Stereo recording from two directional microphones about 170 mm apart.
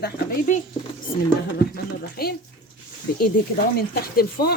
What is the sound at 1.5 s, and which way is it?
Speech, 65° left (ahead or behind).